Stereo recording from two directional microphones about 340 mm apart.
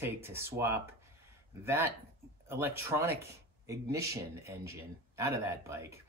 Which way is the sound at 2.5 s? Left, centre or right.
Centre.